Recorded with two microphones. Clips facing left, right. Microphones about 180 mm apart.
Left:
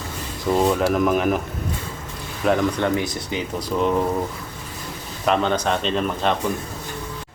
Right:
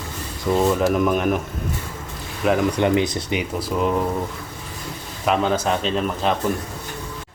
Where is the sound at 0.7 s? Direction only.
5° left (ahead or behind).